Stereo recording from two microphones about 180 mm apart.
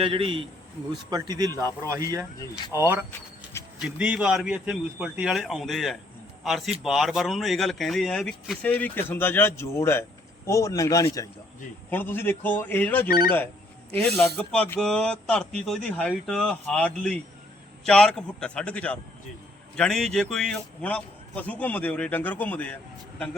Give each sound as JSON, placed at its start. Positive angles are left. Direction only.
{"t": 0.0, "sound": "a man's voice", "side_deg": -30}
{"t": 2.7, "sound": "speech", "side_deg": -15}
{"t": 13.1, "sound": "speech", "side_deg": 55}
{"t": 14.3, "sound": "speech", "side_deg": 5}